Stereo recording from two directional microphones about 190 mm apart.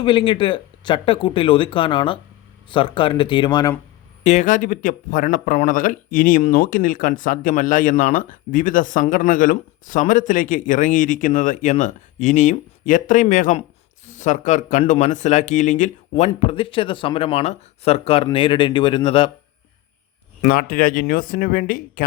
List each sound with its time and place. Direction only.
0.0 s speech: 25° left (ahead or behind)
4.2 s speech: 35° left (ahead or behind)
20.4 s speech: 50° left (ahead or behind)